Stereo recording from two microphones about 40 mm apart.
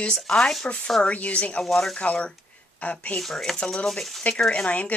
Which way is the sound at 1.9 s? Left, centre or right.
Left.